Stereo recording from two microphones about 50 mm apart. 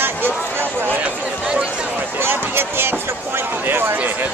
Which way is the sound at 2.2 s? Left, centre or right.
Right.